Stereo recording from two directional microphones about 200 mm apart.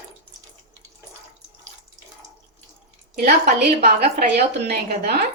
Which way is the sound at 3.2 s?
50° right (ahead or behind).